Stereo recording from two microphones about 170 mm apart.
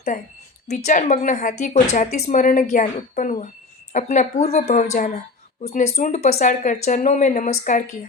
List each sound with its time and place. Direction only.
0.7 s speech: 40° left (ahead or behind)